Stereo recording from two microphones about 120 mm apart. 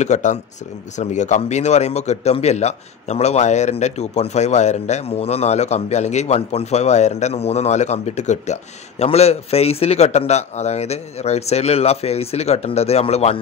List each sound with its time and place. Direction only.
0.0 s speech: 80° left; by 13.4 s 60° left (ahead or behind)